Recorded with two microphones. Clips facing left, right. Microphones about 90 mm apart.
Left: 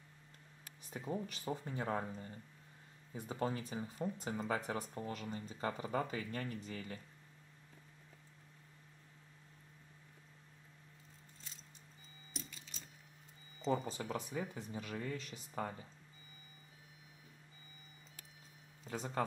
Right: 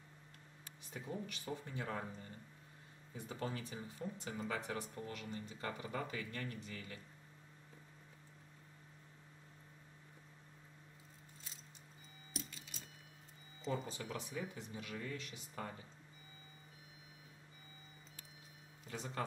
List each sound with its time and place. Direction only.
0.9 s speech: 35° left (ahead or behind)
12.3 s a sound: 10° right (ahead or behind)
13.8 s speech: 35° left (ahead or behind)
18.9 s speech: 30° left (ahead or behind)